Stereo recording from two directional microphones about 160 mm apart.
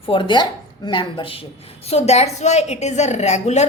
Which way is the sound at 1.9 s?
40° left (ahead or behind).